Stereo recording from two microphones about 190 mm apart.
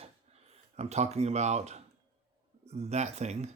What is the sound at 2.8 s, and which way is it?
Speech, 35° right (ahead or behind).